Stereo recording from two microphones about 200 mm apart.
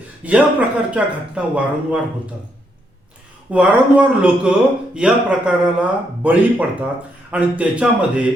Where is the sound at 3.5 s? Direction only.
5° right (ahead or behind).